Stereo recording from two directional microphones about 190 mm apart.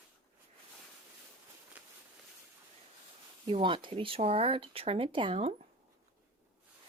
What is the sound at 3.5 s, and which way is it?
Speech, 25° right (ahead or behind).